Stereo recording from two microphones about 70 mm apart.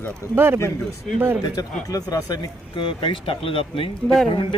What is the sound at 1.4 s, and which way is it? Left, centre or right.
Speech, left.